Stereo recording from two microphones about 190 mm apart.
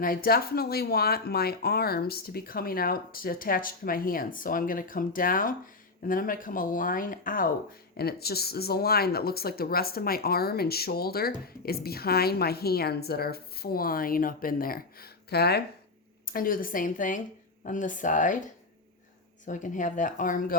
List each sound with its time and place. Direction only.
0.0 s speech: 50° left (ahead or behind)
19.5 s speech: 40° left (ahead or behind)